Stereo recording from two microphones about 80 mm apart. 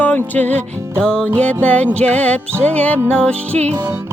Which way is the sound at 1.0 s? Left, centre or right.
Centre.